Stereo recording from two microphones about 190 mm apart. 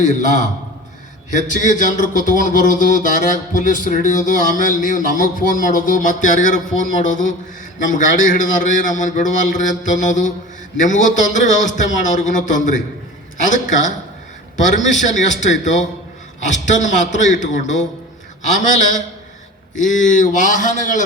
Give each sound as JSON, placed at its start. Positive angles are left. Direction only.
{"t": 0.0, "sound": "a man's voice", "side_deg": 40}
{"t": 14.9, "sound": "a man's voice", "side_deg": 40}